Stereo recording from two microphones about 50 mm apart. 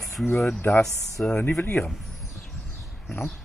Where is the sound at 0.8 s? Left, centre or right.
Centre.